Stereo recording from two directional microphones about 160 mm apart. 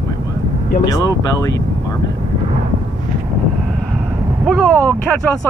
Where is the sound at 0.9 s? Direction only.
20° left (ahead or behind).